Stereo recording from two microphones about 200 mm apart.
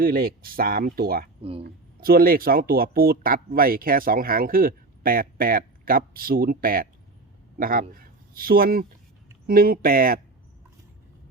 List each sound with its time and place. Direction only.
0.0 s speech: 45° right (ahead or behind)
1.4 s speech: 30° right (ahead or behind)
1.6 s speech: 45° right (ahead or behind)